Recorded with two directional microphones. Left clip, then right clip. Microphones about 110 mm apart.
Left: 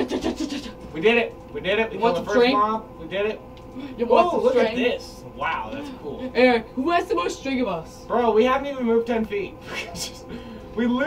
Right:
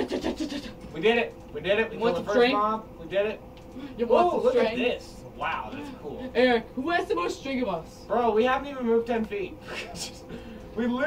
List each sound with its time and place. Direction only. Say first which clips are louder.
0.0 s a sound: left 4 dB; 30° right (ahead or behind)
0.9 s speech: left 4 dB; centre (ahead or behind)
2.0 s speech: left 6 dB; 35° right (ahead or behind)
2.5 s speech: left 4 dB; centre (ahead or behind)
4.0 s speech: left 4 dB; 35° right (ahead or behind)
4.7 s a man's voice: left 4 dB; centre (ahead or behind)
6.3 s speech: left 4 dB; 35° right (ahead or behind)
8.1 s speech: left 4 dB; centre (ahead or behind)